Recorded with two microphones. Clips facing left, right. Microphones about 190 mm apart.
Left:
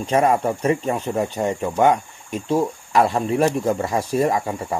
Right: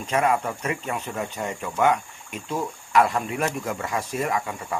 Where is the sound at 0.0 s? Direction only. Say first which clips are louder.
Left 5 dB; 35° left (ahead or behind).